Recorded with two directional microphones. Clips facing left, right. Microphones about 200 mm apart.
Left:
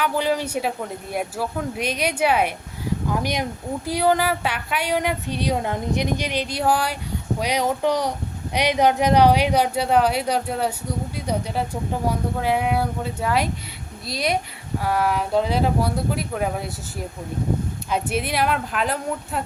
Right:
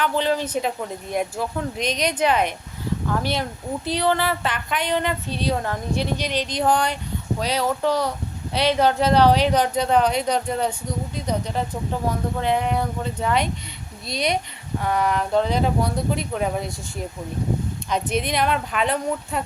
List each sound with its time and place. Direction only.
0.0 s speech: 10° left (ahead or behind)
3.8 s speech: 10° left (ahead or behind)
17.9 s speech: 5° left (ahead or behind)